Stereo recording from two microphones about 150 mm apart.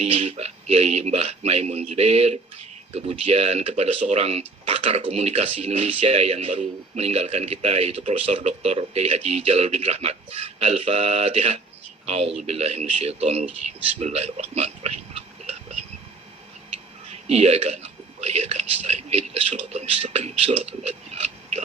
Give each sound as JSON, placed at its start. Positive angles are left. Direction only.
{"t": 0.0, "sound": "speech", "side_deg": -45}
{"t": 17.1, "sound": "speech", "side_deg": -45}